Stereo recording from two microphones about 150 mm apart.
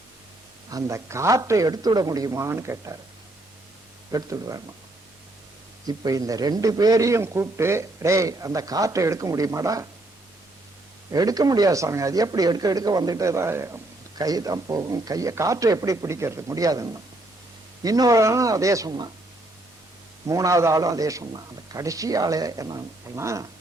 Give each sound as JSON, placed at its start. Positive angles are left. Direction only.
{"t": 0.7, "sound": "a man's voice", "side_deg": -20}
{"t": 4.1, "sound": "a man's voice", "side_deg": -25}
{"t": 5.8, "sound": "a man's voice", "side_deg": -25}
{"t": 11.1, "sound": "a man's voice", "side_deg": -25}
{"t": 20.2, "sound": "a man's voice", "side_deg": -20}